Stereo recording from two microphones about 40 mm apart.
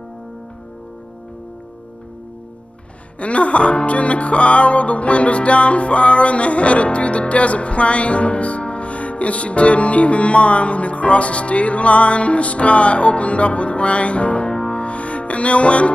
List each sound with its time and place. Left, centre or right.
3.2 s music: left